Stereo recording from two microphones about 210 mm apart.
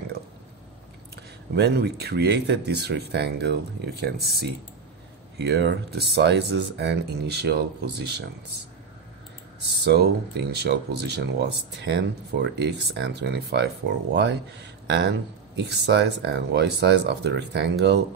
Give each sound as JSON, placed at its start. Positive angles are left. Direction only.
{"t": 1.1, "sound": "speech", "side_deg": -50}
{"t": 9.8, "sound": "speech", "side_deg": -50}
{"t": 15.5, "sound": "speech", "side_deg": -50}